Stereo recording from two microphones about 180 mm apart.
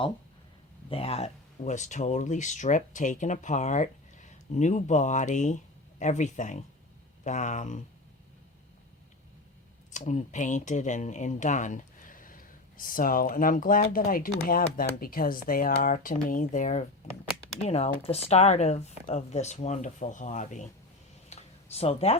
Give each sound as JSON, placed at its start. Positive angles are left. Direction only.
{"t": 0.9, "sound": "speech", "side_deg": 30}
{"t": 9.9, "sound": "speech", "side_deg": 40}
{"t": 17.6, "sound": "speech", "side_deg": 35}
{"t": 21.2, "sound": "a sound", "side_deg": 35}